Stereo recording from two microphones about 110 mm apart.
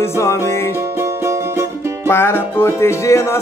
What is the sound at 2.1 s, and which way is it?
Music, 20° left (ahead or behind).